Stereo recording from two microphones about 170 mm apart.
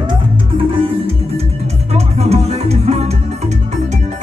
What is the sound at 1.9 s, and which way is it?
Music, 40° right (ahead or behind).